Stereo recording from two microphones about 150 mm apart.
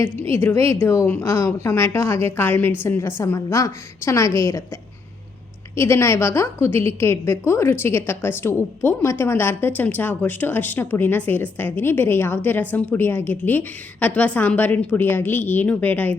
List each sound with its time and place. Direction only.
0.0 s a woman's voice: 15° left (ahead or behind)